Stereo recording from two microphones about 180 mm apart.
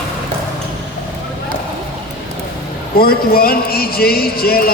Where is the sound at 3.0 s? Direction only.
55° left (ahead or behind).